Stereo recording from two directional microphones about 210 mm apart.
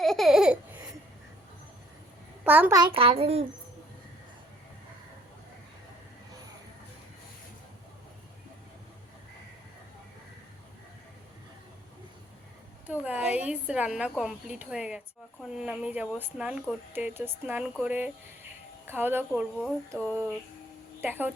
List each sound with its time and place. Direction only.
0.0 s laughter: centre (ahead or behind)
2.4 s a child's voice: 10° right (ahead or behind); by 3.4 s 30° right (ahead or behind)
12.9 s speech: 5° right (ahead or behind)
21.0 s speech: 10° right (ahead or behind)